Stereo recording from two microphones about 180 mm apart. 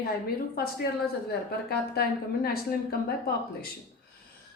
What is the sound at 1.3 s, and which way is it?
A woman's voice, 60° left (ahead or behind).